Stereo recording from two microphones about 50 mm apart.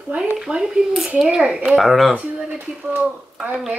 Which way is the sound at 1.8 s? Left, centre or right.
Centre.